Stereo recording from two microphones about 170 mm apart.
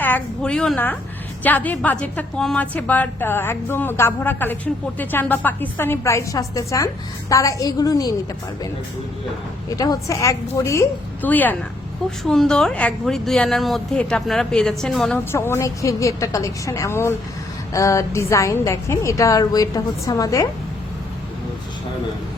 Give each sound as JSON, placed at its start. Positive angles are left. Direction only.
{"t": 0.0, "sound": "a woman's voice", "side_deg": 10}
{"t": 9.6, "sound": "a woman's voice", "side_deg": 20}
{"t": 15.2, "sound": "a woman's voice", "side_deg": 15}